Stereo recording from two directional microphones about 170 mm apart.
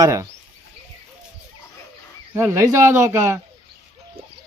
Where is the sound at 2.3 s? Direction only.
15° right (ahead or behind).